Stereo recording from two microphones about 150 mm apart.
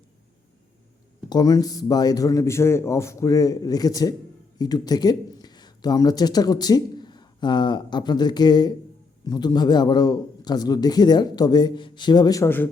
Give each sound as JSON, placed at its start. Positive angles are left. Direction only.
{"t": 1.3, "sound": "a man's voice", "side_deg": 25}